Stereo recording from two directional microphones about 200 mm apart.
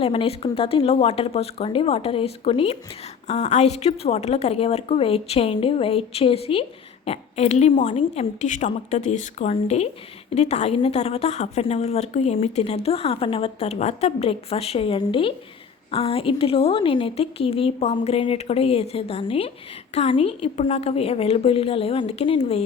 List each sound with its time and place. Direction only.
0.0 s a woman's voice: 30° left (ahead or behind)